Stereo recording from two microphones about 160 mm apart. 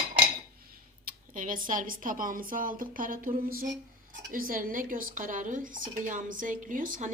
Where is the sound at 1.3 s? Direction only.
55° right (ahead or behind).